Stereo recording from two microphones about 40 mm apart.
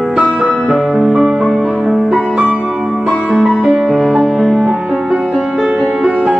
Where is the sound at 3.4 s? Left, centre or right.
Centre.